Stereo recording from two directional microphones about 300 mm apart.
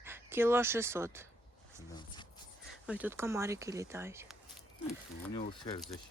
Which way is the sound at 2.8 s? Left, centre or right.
Centre.